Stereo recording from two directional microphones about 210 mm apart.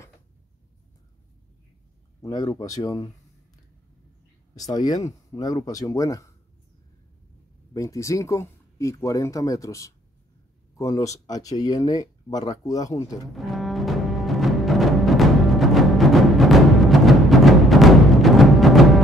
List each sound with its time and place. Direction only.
2.2 s speech: 15° left (ahead or behind)
4.6 s speech: 20° left (ahead or behind)
7.7 s speech: 15° left (ahead or behind)
13.3 s music: centre (ahead or behind)